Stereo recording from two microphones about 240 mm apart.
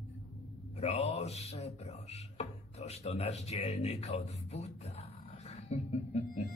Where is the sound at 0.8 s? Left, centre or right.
Left.